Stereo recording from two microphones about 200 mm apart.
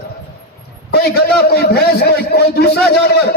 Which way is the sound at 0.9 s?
50° left (ahead or behind).